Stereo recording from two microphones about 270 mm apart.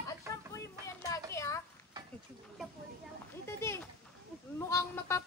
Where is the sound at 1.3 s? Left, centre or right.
Centre.